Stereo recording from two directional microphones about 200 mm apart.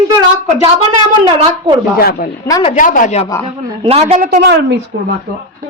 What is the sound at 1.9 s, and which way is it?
Speech, 50° left (ahead or behind).